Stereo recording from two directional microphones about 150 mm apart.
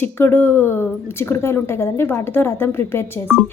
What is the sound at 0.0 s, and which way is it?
A woman's voice, 15° left (ahead or behind).